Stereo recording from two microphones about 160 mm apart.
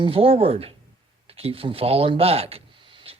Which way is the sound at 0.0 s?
35° right (ahead or behind).